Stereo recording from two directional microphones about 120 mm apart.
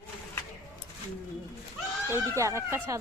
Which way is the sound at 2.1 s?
25° right (ahead or behind).